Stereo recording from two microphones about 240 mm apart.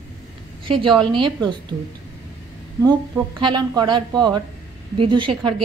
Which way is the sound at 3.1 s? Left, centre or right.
Centre.